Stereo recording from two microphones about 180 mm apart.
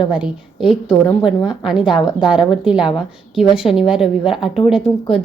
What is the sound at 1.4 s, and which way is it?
Speech, 30° left (ahead or behind).